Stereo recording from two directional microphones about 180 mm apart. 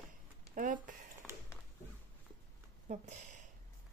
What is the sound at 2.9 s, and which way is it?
Speech, 40° right (ahead or behind).